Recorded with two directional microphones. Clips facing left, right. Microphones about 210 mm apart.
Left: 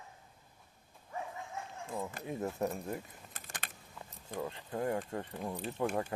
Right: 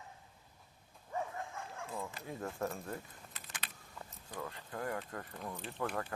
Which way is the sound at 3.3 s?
45° left (ahead or behind).